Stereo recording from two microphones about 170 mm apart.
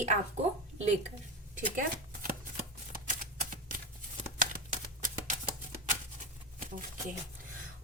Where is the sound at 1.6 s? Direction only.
55° right (ahead or behind).